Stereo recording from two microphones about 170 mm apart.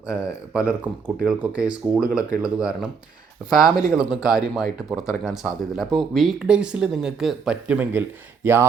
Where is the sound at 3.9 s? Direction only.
5° right (ahead or behind).